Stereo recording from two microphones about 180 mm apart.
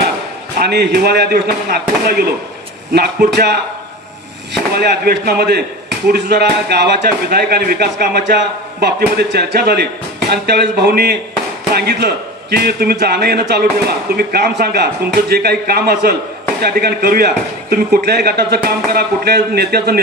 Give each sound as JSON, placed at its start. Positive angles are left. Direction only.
{"t": 0.6, "sound": "a man's voice", "side_deg": -65}
{"t": 4.7, "sound": "a man's voice", "side_deg": -60}